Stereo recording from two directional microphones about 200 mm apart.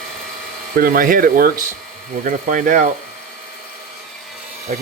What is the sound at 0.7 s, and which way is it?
Speech, 45° right (ahead or behind).